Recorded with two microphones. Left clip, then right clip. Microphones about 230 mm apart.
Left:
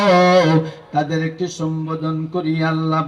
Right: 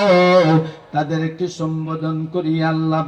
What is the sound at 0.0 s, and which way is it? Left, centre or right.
Music, left.